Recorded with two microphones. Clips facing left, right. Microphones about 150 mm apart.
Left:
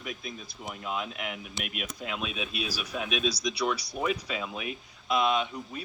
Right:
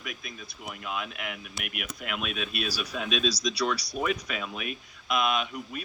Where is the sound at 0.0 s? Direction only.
80° right.